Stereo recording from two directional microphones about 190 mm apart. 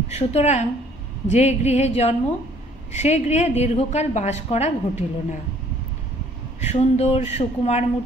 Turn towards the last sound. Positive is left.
turn(degrees=35)  # may be behind; listen again after turning